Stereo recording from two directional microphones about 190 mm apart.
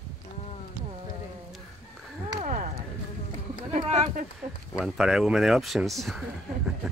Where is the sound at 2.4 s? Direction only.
40° right (ahead or behind).